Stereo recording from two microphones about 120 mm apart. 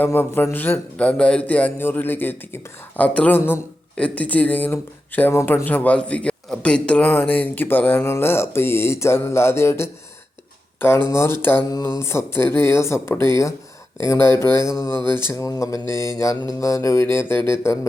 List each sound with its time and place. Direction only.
0.0 s speech: 15° left (ahead or behind)